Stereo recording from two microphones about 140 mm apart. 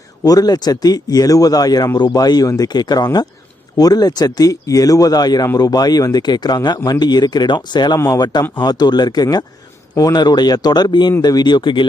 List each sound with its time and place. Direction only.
0.3 s speech: 25° left (ahead or behind)